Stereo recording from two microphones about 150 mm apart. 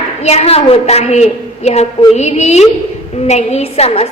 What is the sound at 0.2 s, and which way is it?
A woman's voice, 45° left (ahead or behind).